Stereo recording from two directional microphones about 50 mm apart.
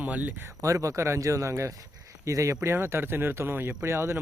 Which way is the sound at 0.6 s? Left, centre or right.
Right.